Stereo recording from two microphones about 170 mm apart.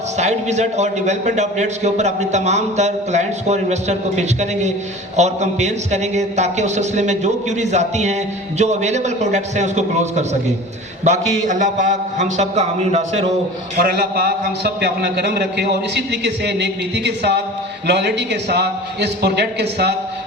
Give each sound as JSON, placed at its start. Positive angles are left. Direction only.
{"t": 0.2, "sound": "a man's voice", "side_deg": -40}
{"t": 13.8, "sound": "a man's voice", "side_deg": -60}